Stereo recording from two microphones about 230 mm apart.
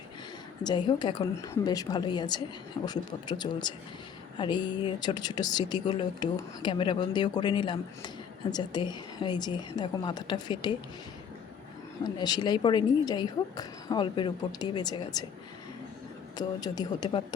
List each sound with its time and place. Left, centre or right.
0.6 s speech: centre
12.1 s speech: centre
16.4 s speech: centre